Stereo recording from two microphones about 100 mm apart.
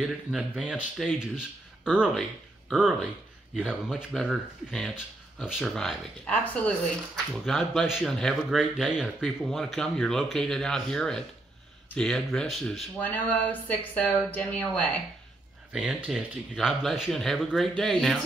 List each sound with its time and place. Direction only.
0.0 s speech: 5° right (ahead or behind)
2.7 s speech: 5° right (ahead or behind)
6.2 s speech: 15° left (ahead or behind)
7.4 s speech: centre (ahead or behind)
13.0 s speech: 15° left (ahead or behind)
15.7 s speech: 10° right (ahead or behind)